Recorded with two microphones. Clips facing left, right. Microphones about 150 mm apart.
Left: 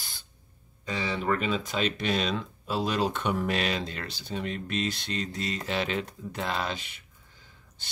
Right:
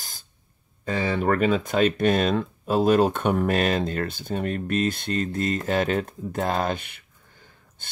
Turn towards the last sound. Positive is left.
turn(degrees=-50)  # may be behind; listen again after turning